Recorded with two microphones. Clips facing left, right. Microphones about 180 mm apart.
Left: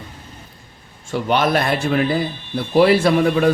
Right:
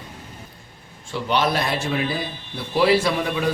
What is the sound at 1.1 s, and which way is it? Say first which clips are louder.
A man's voice: left 4 dB; 50° left (ahead or behind).